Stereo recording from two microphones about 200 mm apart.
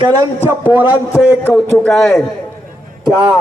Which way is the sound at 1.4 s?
5° left (ahead or behind).